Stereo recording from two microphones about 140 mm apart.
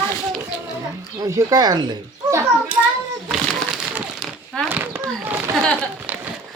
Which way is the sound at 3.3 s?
5° right (ahead or behind).